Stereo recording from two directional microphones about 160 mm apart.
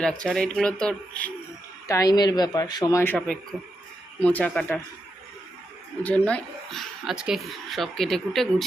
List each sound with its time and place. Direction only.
0.0 s speech: 5° left (ahead or behind)
1.9 s speech: 20° left (ahead or behind)
3.0 s speech: 10° left (ahead or behind)
6.0 s speech: 10° left (ahead or behind)